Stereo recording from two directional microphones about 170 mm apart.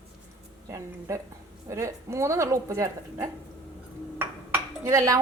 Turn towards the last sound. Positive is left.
turn(degrees=-20)  # may be behind; listen again after turning